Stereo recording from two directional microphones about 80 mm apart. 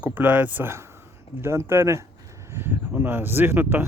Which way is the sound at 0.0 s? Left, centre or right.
Right.